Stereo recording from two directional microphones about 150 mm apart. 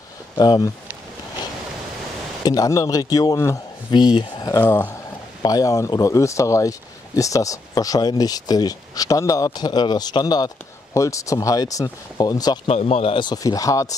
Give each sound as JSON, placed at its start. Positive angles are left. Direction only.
{"t": 0.4, "sound": "speech", "side_deg": 30}
{"t": 2.4, "sound": "speech", "side_deg": 25}
{"t": 4.6, "sound": "speech", "side_deg": 15}
{"t": 5.4, "sound": "speech", "side_deg": 25}
{"t": 12.6, "sound": "speech", "side_deg": 45}